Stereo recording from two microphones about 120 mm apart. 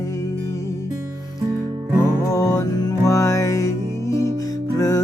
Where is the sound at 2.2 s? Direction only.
30° left (ahead or behind).